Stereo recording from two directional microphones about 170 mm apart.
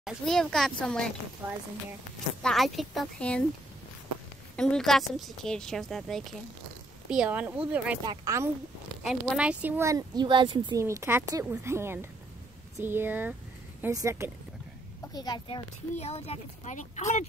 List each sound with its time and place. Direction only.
0.0 s speech: centre (ahead or behind)
1.4 s a woman's voice: 25° right (ahead or behind)
2.4 s speech: centre (ahead or behind)
4.6 s speech: 5° left (ahead or behind)
8.0 s a woman's voice: 20° right (ahead or behind)
9.0 s speech: centre (ahead or behind); by 10.8 s 25° right (ahead or behind)
10.8 s speech: 15° right (ahead or behind)
15.1 s a woman's voice: 25° left (ahead or behind)
16.0 s speech: 35° left (ahead or behind)